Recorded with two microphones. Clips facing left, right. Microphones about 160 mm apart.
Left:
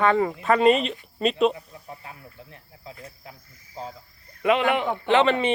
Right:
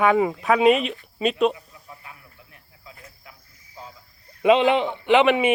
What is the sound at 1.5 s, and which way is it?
Snake, 35° left (ahead or behind).